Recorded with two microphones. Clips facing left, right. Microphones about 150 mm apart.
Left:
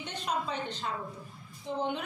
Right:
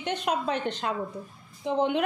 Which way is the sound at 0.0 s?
70° right (ahead or behind).